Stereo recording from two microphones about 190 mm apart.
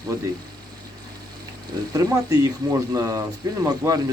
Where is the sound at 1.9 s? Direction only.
20° right (ahead or behind).